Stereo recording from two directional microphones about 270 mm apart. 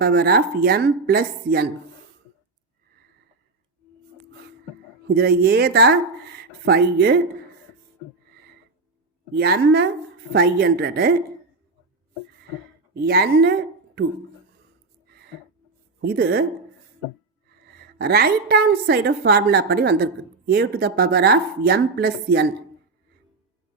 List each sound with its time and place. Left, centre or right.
0.0 s a woman's voice: right
5.0 s a woman's voice: right
9.3 s a woman's voice: right
12.9 s a woman's voice: right
15.0 s a sound: right
16.0 s a woman's voice: right
17.9 s a woman's voice: right